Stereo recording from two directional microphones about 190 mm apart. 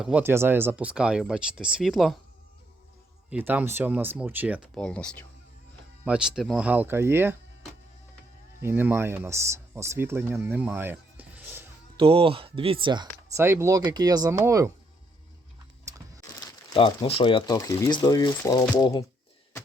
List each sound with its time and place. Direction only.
0.0 s speech: 10° right (ahead or behind)
3.2 s speech: 10° right (ahead or behind)
4.7 s speech: 5° left (ahead or behind); by 7.3 s 10° right (ahead or behind)
8.6 s speech: 10° right (ahead or behind)
10.4 s music: 10° right (ahead or behind)
11.9 s speech: 30° right (ahead or behind)
15.9 s music: 20° right (ahead or behind)
16.2 s speech: 20° left (ahead or behind)